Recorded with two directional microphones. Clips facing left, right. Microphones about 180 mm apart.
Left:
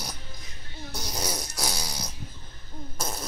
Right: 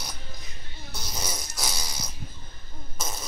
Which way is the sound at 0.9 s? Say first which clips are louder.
Left 3 dB; 15° left (ahead or behind).